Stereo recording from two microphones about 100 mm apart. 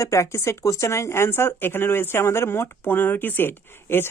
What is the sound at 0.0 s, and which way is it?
Speech, 30° left (ahead or behind).